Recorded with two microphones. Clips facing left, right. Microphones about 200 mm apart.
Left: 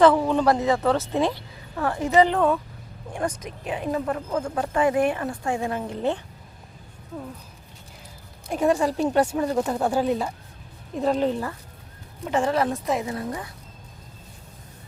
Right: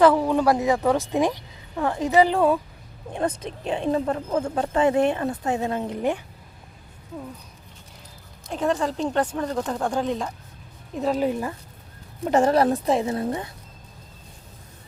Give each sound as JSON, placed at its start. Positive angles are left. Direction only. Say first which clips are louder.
{"t": 0.0, "sound": "a woman's voice", "louder": "even", "side_deg": -10}
{"t": 3.1, "sound": "speech", "louder": "right 2 dB", "side_deg": -25}
{"t": 8.4, "sound": "speech", "louder": "left 3 dB", "side_deg": 10}
{"t": 10.9, "sound": "a woman's voice", "louder": "left 1 dB", "side_deg": 0}
{"t": 12.3, "sound": "a woman's voice", "louder": "right 4 dB", "side_deg": -40}